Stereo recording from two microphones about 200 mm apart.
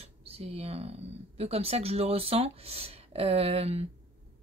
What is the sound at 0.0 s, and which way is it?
Speech, 30° right (ahead or behind).